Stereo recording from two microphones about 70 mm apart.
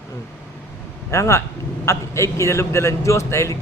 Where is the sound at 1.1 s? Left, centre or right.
Left.